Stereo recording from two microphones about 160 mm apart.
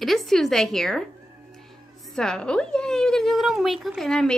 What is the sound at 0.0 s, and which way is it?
A woman's voice, centre (ahead or behind).